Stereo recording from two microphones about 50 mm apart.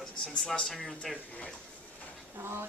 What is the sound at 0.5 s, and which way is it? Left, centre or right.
Speech, centre.